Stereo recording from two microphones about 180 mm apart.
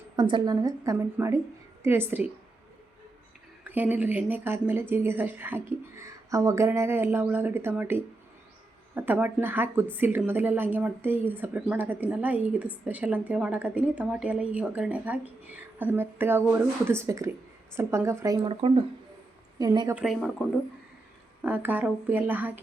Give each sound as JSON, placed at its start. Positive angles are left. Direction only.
{"t": 0.2, "sound": "a woman's voice", "side_deg": -25}
{"t": 3.6, "sound": "speech", "side_deg": -10}
{"t": 18.4, "sound": "a woman's voice", "side_deg": -30}
{"t": 19.9, "sound": "speech", "side_deg": -5}
{"t": 21.4, "sound": "speech", "side_deg": -10}